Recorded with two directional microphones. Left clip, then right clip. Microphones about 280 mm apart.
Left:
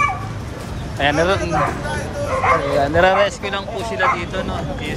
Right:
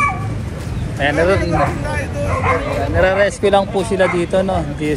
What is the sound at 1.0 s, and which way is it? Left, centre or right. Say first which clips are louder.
Speech: right 2 dB; centre.